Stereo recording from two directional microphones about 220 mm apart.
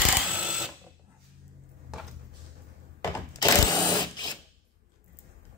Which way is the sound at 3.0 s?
10° left (ahead or behind).